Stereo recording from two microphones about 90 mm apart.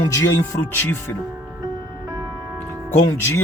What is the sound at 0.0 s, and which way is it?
Speech, 40° left (ahead or behind).